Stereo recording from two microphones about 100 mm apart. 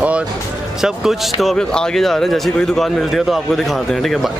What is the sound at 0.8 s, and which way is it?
Speech, 5° right (ahead or behind).